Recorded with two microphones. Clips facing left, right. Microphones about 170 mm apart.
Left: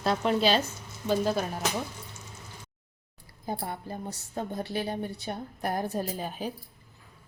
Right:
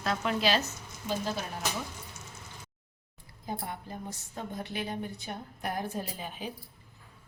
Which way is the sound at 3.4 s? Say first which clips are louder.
Left 3 dB; 35° left (ahead or behind).